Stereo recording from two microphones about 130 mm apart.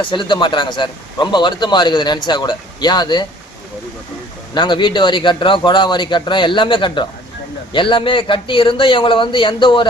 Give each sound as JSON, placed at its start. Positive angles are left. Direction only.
{"t": 0.0, "sound": "a man's voice", "side_deg": 40}
{"t": 4.5, "sound": "a man's voice", "side_deg": 40}